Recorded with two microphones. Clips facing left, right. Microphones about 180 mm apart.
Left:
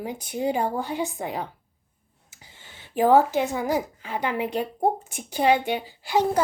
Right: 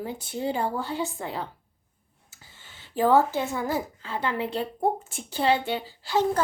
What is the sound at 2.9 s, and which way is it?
Speech, 15° left (ahead or behind).